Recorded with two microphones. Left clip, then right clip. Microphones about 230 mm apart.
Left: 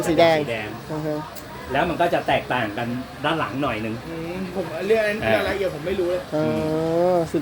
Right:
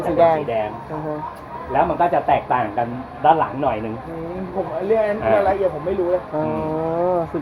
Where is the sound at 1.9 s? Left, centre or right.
Left.